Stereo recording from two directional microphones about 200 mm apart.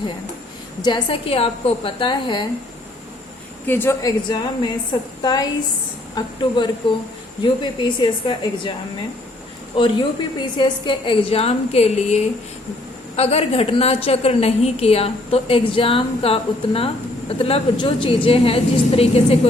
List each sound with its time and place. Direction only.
0.8 s a woman's voice: 25° left (ahead or behind)
3.7 s a woman's voice: 10° left (ahead or behind)
9.7 s a woman's voice: 25° left (ahead or behind)